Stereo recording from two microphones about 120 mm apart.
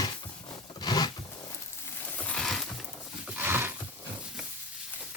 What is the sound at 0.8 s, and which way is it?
Zipper, 35° left (ahead or behind).